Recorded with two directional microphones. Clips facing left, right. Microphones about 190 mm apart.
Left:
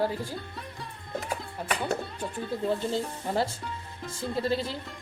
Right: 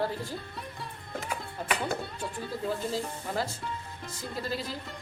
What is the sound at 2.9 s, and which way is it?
Speech, 30° left (ahead or behind).